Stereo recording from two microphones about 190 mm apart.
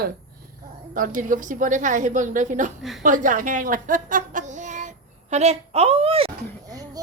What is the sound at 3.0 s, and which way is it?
Speech, 45° right (ahead or behind).